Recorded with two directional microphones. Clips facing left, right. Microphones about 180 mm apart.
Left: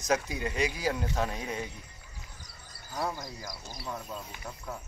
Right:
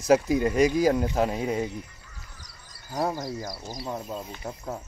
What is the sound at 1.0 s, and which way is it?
Speech, 25° right (ahead or behind).